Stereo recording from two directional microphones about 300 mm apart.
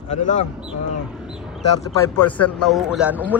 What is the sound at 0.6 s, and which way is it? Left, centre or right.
Speech, centre.